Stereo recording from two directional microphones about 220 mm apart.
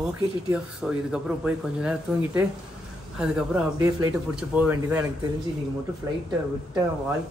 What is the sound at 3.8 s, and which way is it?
Speech, 15° right (ahead or behind).